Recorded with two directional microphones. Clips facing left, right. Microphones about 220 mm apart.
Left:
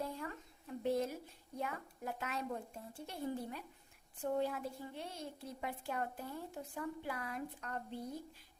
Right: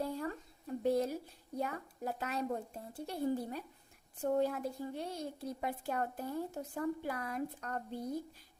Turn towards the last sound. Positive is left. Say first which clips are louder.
# right 3 dB
turn(degrees=-45)  # may be behind; listen again after turning